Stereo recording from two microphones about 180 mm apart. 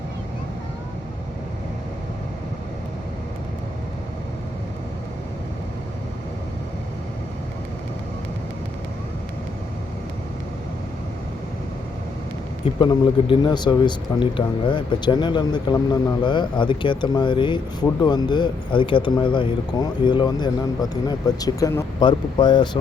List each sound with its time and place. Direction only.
12.8 s speech: 25° left (ahead or behind)